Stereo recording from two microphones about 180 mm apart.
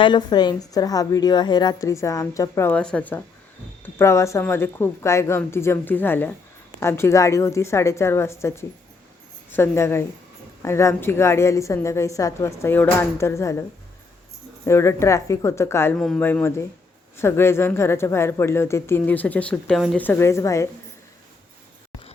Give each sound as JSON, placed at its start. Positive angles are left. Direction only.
{"t": 0.0, "sound": "a woman's voice", "side_deg": 25}
{"t": 20.1, "sound": "a woman's voice", "side_deg": 15}